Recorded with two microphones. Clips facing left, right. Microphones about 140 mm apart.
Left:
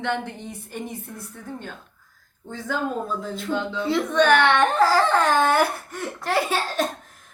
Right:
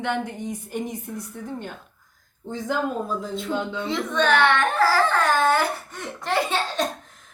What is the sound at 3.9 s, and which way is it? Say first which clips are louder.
Speech: left 4 dB; 10° left (ahead or behind).